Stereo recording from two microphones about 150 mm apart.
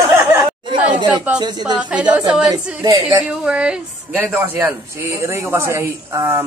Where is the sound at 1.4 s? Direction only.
30° right (ahead or behind).